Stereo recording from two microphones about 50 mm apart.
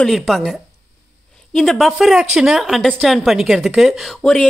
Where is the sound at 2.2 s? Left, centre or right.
Centre.